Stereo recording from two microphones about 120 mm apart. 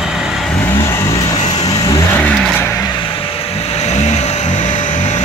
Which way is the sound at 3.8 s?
65° left (ahead or behind).